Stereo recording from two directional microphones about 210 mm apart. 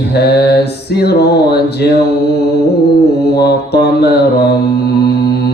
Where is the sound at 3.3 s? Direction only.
50° left (ahead or behind).